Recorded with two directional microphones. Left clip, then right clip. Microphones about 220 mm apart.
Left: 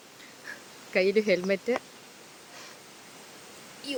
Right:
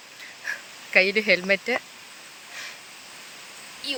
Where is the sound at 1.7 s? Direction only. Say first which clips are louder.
Right 3 dB; 5° left (ahead or behind).